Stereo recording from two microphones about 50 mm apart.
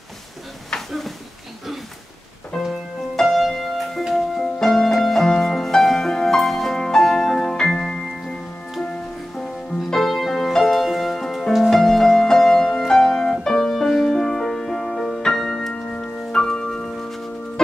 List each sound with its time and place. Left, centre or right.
0.7 s a sound: centre
2.5 s music: centre
9.4 s music: centre
15.7 s music: left